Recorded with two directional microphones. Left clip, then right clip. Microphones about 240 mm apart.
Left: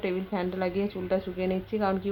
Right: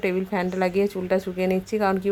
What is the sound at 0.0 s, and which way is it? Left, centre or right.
A woman's voice, right.